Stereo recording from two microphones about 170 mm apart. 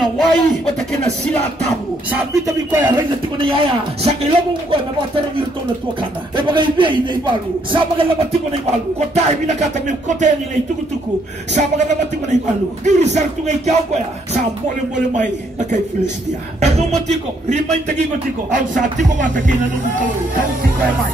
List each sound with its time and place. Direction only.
0.0 s a sound: centre (ahead or behind)
2.4 s speech: 20° right (ahead or behind)
3.3 s speech: 30° right (ahead or behind)
6.3 s speech: 30° right (ahead or behind); by 10.3 s 45° right (ahead or behind)
11.5 s music: 45° right (ahead or behind)
15.0 s music: 45° right (ahead or behind)
16.5 s speech: 40° right (ahead or behind)
18.5 s music: 50° right (ahead or behind)